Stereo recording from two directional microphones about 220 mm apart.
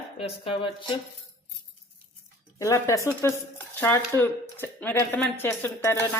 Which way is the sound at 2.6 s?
15° left (ahead or behind).